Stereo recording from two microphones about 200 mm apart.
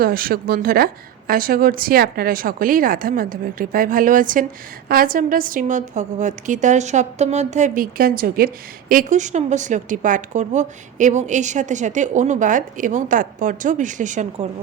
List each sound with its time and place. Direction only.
0.0 s a woman's voice: 45° right (ahead or behind)